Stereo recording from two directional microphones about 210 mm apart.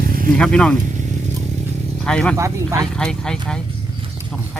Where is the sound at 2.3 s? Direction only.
15° right (ahead or behind).